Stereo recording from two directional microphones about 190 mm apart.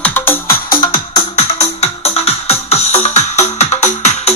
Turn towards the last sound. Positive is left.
turn(degrees=35)  # may be behind; listen again after turning